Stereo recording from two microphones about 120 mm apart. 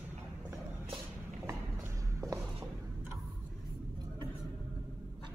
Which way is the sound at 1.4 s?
25° right (ahead or behind).